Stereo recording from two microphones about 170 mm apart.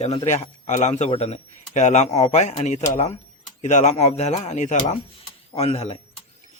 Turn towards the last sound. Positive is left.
turn(degrees=40)  # may be behind; listen again after turning